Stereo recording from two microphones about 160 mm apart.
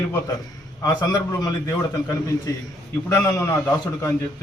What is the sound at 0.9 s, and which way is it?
Speech, 25° left (ahead or behind).